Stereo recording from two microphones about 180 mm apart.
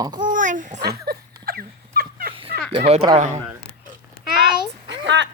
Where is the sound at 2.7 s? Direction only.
35° right (ahead or behind).